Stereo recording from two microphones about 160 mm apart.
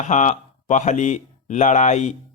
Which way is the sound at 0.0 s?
45° left (ahead or behind).